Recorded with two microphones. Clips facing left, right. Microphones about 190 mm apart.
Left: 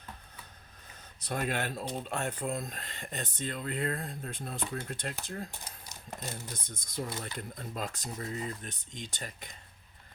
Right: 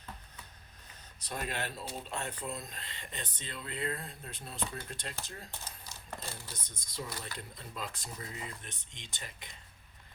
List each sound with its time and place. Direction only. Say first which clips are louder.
1.3 s speech: left 5 dB; 55° left (ahead or behind)
6.1 s speech: left 4 dB; 20° left (ahead or behind)
6.5 s speech: left 6 dB; 50° left (ahead or behind)